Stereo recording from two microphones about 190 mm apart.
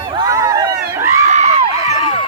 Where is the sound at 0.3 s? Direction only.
20° right (ahead or behind).